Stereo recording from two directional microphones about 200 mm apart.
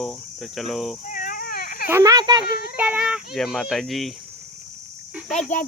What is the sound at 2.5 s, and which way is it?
Child singing, 50° left (ahead or behind).